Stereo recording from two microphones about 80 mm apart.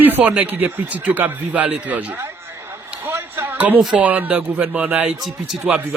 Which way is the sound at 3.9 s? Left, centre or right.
Right.